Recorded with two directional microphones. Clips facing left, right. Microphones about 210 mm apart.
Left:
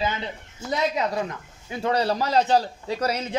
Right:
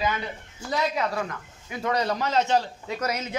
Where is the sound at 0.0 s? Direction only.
25° left (ahead or behind).